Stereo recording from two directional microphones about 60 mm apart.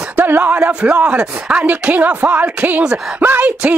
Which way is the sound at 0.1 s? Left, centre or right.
Right.